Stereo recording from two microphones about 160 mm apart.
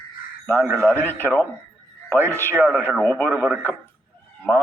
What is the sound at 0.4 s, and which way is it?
A man's voice, 10° left (ahead or behind).